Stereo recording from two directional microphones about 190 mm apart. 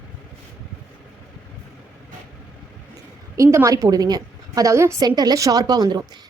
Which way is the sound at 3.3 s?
15° right (ahead or behind).